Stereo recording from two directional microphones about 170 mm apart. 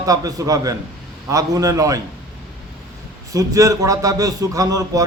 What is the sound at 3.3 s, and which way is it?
A man's voice, 20° right (ahead or behind).